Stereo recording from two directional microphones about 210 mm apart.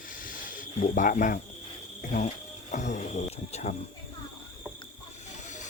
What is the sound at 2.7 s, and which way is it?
Speech, 35° left (ahead or behind).